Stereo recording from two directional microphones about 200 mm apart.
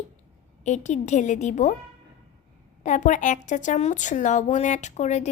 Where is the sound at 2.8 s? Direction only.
40° left (ahead or behind).